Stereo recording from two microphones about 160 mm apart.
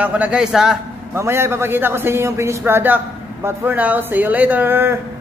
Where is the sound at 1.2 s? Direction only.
15° right (ahead or behind).